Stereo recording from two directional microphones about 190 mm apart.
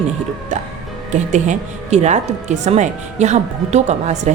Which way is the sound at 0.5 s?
40° right (ahead or behind).